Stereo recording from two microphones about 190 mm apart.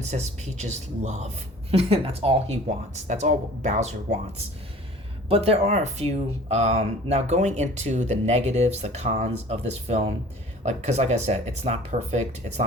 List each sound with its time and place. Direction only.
0.0 s speech: 35° right (ahead or behind)